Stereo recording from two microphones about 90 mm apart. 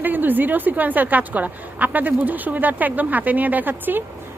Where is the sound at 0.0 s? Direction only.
20° right (ahead or behind).